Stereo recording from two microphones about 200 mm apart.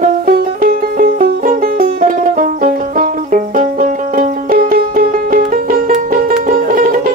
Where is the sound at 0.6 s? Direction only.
45° right (ahead or behind).